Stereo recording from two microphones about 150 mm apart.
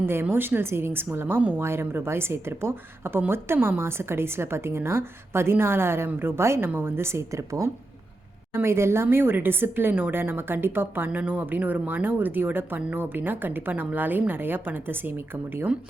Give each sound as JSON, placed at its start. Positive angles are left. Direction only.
{"t": 0.0, "sound": "a woman's voice", "side_deg": -15}